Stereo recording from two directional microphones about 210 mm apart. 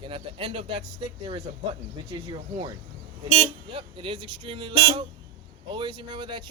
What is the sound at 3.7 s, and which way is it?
Speech, 25° right (ahead or behind).